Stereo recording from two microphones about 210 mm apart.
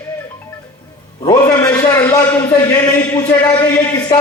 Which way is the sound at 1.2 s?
20° left (ahead or behind).